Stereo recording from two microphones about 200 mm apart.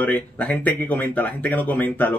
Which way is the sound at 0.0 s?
10° left (ahead or behind).